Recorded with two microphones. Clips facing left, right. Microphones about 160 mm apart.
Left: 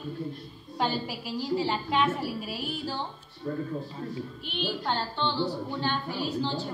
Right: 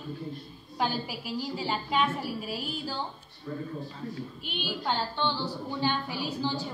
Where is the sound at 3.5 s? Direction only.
55° left (ahead or behind).